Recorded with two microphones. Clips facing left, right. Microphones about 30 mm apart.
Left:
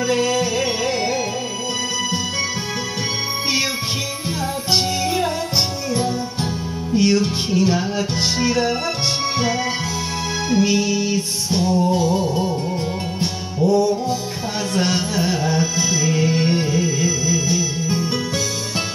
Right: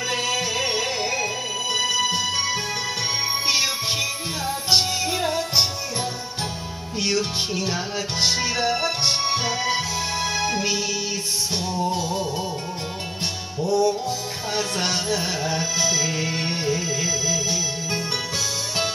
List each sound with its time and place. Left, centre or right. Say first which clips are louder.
0.0 s music: left 5 dB; centre
1.8 s music: right 3 dB; centre
3.4 s music: left 2 dB; centre
4.8 s music: left 4 dB; centre
6.9 s music: left 7 dB; centre
13.6 s music: left 5 dB; centre
14.8 s music: left 4 dB; centre
16.3 s music: left 7 dB; centre
16.7 s music: left 5 dB; centre